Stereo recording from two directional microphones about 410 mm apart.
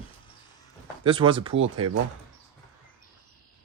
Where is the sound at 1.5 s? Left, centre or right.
Right.